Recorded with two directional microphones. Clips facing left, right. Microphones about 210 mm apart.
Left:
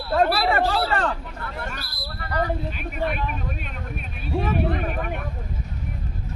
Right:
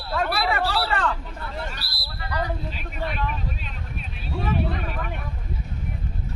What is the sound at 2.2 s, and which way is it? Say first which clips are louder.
Speech: left 3 dB; 50° left (ahead or behind).